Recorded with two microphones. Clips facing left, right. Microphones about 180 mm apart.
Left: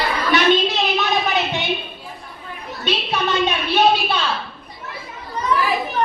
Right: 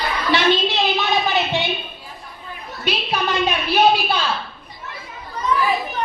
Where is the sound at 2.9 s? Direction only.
Centre (ahead or behind).